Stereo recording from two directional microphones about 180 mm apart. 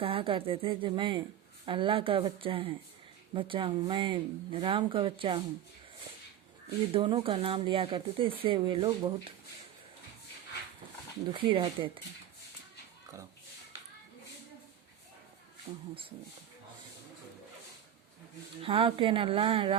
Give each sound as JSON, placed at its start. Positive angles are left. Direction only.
{"t": 0.0, "sound": "speech", "side_deg": -30}
{"t": 6.9, "sound": "speech", "side_deg": -30}
{"t": 11.3, "sound": "speech", "side_deg": -30}
{"t": 15.7, "sound": "speech", "side_deg": -30}
{"t": 18.6, "sound": "speech", "side_deg": -30}